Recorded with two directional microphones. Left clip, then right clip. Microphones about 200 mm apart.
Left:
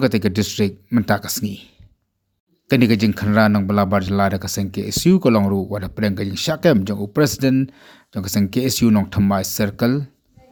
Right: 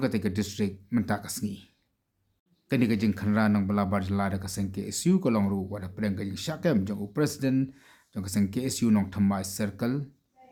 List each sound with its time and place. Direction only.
0.0 s speech: 35° left (ahead or behind)